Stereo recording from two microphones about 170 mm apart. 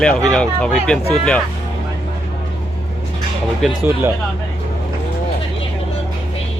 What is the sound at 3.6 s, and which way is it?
Speech, centre (ahead or behind).